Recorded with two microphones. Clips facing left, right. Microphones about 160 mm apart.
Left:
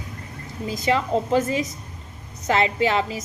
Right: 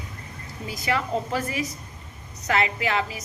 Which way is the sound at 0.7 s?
25° left (ahead or behind).